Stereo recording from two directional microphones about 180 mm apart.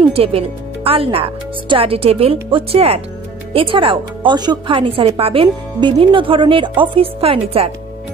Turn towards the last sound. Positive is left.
turn(degrees=-30)  # may be behind; listen again after turning